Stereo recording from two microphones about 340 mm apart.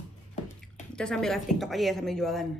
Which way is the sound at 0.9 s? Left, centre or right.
Centre.